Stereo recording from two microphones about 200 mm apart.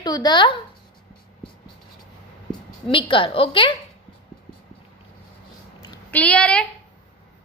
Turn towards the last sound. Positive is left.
turn(degrees=5)  # may be behind; listen again after turning